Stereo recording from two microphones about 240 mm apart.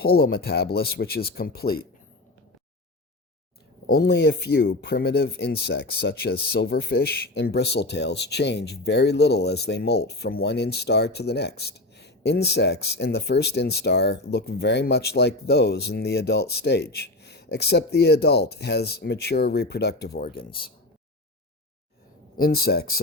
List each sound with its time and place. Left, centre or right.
0.0 s speech: left
3.8 s speech: left
22.4 s speech: left